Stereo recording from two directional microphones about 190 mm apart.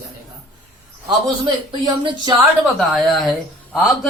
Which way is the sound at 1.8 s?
20° right (ahead or behind).